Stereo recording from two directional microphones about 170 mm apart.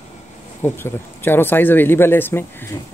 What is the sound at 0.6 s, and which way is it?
Speech, 15° left (ahead or behind).